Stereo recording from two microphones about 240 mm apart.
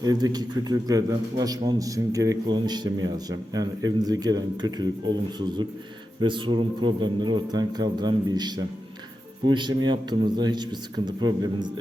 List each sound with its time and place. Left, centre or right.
0.0 s a man's voice: centre